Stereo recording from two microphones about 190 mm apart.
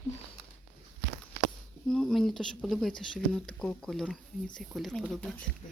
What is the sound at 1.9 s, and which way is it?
Speech, 5° left (ahead or behind).